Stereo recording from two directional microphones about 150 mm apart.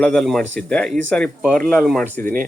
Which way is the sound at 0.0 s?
5° left (ahead or behind).